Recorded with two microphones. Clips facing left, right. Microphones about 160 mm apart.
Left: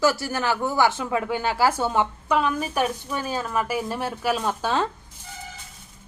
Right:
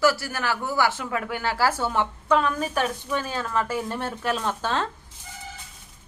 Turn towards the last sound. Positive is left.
turn(degrees=10)  # may be behind; listen again after turning